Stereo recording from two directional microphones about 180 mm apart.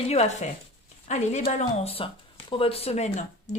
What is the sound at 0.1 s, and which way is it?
Speech, 40° left (ahead or behind).